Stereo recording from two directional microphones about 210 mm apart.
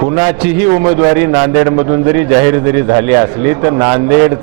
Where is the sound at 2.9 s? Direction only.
25° right (ahead or behind).